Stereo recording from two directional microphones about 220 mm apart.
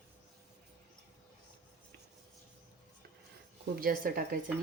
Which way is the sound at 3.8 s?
40° right (ahead or behind).